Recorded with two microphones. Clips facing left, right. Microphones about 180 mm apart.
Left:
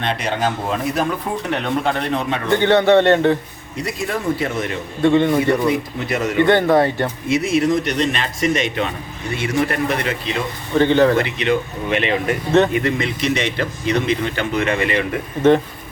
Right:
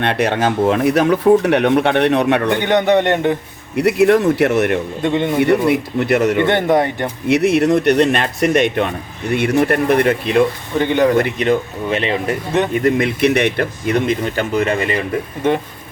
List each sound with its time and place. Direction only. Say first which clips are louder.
0.0 s speech: right 5 dB; 65° right (ahead or behind)
2.6 s speech: left 3 dB; 15° right (ahead or behind)
3.8 s speech: right 12 dB; 65° right (ahead or behind)
5.0 s speech: left 4 dB; 20° right (ahead or behind)
5.6 s speech: right 4 dB; 65° right (ahead or behind)
6.4 s speech: left 1 dB; 20° right (ahead or behind)
7.3 s speech: right 5 dB; 65° right (ahead or behind)
10.8 s speech: even; 15° right (ahead or behind)
11.2 s speech: right 3 dB; 45° right (ahead or behind)
12.8 s speech: right 6 dB; 55° right (ahead or behind); by 15.0 s 35° right (ahead or behind)